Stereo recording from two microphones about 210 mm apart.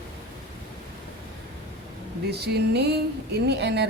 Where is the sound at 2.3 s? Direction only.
50° right (ahead or behind).